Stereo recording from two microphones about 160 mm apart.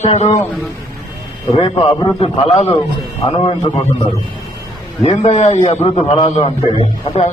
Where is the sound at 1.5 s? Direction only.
35° left (ahead or behind).